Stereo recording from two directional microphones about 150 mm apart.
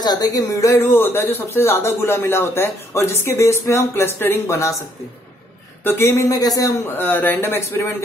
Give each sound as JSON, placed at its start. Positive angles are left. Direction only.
{"t": 0.0, "sound": "speech", "side_deg": 25}
{"t": 5.9, "sound": "speech", "side_deg": 15}